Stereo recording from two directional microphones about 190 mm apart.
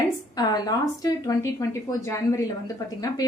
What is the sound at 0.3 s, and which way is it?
A woman's voice, 20° left (ahead or behind).